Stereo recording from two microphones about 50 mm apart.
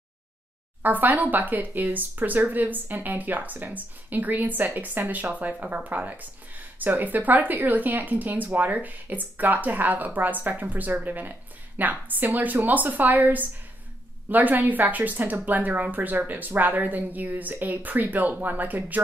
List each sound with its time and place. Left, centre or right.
0.8 s speech: right